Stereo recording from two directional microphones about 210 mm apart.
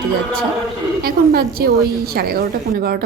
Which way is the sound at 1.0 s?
45° right (ahead or behind).